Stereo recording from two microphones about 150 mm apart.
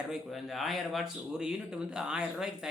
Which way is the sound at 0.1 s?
Centre (ahead or behind).